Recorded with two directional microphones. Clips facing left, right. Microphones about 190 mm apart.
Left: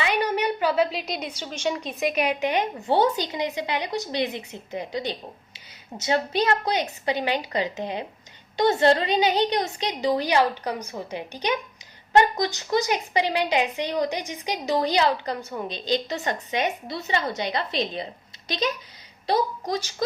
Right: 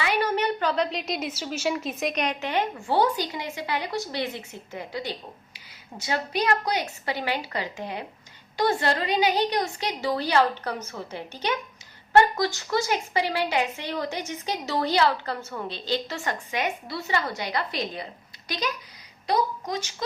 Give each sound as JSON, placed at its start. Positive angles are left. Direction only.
{"t": 0.0, "sound": "a woman's voice", "side_deg": 15}
{"t": 19.3, "sound": "a woman's voice", "side_deg": 35}